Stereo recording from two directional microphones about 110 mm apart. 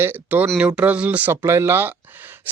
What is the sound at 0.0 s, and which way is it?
Speech, 15° right (ahead or behind).